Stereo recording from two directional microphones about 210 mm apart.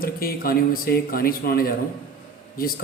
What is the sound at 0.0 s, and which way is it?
A man's voice, 45° left (ahead or behind).